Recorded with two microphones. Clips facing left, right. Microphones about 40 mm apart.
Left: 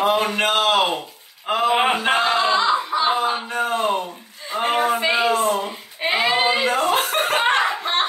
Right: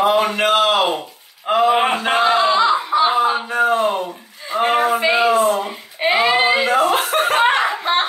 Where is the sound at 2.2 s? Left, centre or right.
Centre.